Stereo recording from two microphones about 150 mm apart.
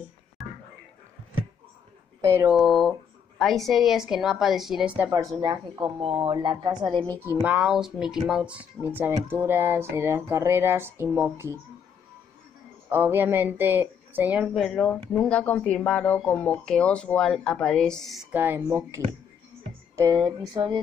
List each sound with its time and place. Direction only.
0.4 s a sound: centre (ahead or behind)
2.2 s speech: 15° right (ahead or behind)
2.5 s speech: centre (ahead or behind)
5.4 s a woman's voice: 35° right (ahead or behind)
7.1 s speech: 15° right (ahead or behind)
12.9 s speech: 15° right (ahead or behind)
18.3 s speech: 15° right (ahead or behind)
20.0 s a sound: 25° right (ahead or behind)